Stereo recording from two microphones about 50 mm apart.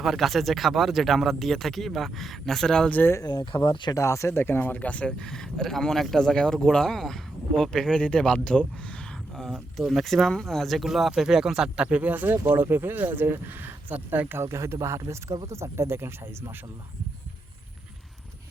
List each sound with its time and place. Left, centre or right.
0.0 s speech: centre
3.5 s speech: left
3.9 s speech: left
4.4 s speech: left
5.2 s speech: centre
9.3 s a sound: centre
9.8 s speech: centre
11.9 s speech: right
14.4 s speech: right